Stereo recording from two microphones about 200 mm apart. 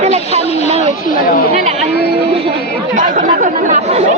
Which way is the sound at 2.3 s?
25° right (ahead or behind).